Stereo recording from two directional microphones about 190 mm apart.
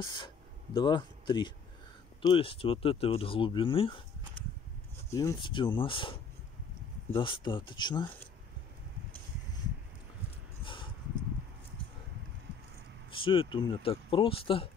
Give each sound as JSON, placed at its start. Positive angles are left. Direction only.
{"t": 0.0, "sound": "speech", "side_deg": 25}
{"t": 5.1, "sound": "speech", "side_deg": 15}
{"t": 10.6, "sound": "a sound", "side_deg": 25}
{"t": 13.1, "sound": "speech", "side_deg": 25}